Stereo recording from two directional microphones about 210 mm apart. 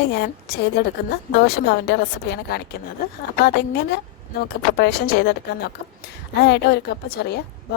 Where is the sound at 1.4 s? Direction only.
50° left (ahead or behind).